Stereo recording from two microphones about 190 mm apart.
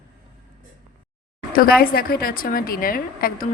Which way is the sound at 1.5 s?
50° left (ahead or behind).